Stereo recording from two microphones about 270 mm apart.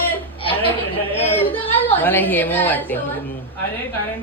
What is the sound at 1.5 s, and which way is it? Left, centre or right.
A woman's voice, centre.